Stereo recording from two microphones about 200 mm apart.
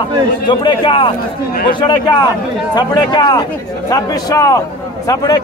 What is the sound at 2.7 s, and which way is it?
A man's voice, 20° left (ahead or behind).